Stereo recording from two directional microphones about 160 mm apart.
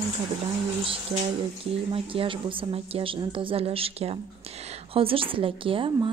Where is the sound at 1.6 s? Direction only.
35° right (ahead or behind).